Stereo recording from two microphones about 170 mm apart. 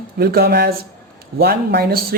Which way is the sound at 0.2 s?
65° right (ahead or behind).